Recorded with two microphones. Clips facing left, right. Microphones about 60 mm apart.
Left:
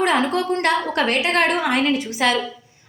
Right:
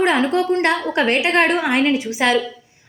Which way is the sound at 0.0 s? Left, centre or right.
Centre.